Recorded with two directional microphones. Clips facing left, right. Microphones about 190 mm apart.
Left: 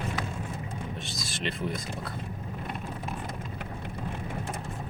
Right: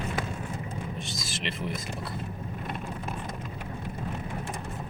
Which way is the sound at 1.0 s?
Centre (ahead or behind).